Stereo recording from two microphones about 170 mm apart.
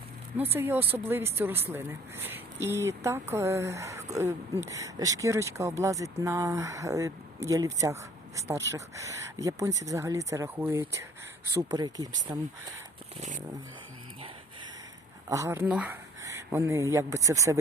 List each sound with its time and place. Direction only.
0.5 s speech: 15° right (ahead or behind)
15.3 s speech: 15° right (ahead or behind)